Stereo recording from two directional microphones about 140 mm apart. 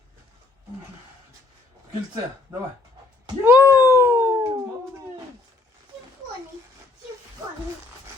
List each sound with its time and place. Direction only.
2.5 s speech: 20° right (ahead or behind)
3.2 s cat: 20° right (ahead or behind)